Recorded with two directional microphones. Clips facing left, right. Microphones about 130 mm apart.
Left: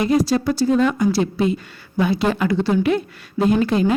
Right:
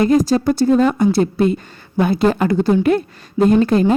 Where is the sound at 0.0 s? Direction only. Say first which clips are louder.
Right 4 dB; 45° right (ahead or behind).